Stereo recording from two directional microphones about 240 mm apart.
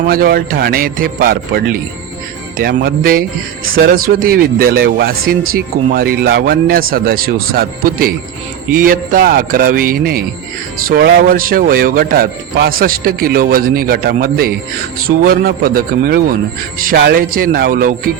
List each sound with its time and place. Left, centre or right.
0.1 s speech: right